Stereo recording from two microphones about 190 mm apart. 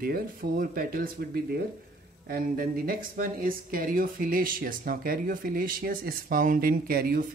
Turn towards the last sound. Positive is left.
turn(degrees=-50)  # may be behind; listen again after turning